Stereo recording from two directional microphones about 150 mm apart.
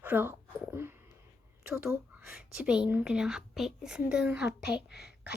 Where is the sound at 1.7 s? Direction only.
10° right (ahead or behind).